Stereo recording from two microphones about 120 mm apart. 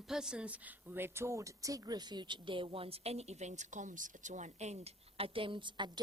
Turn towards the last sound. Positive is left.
turn(degrees=-40)  # may be behind; listen again after turning